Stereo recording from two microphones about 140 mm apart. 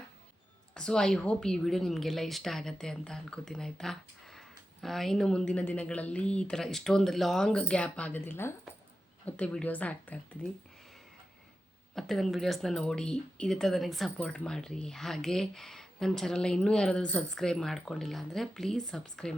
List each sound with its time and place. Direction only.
0.7 s a woman's voice: 5° left (ahead or behind)
11.9 s a woman's voice: centre (ahead or behind)